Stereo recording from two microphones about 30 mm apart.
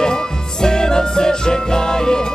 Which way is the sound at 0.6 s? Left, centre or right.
Left.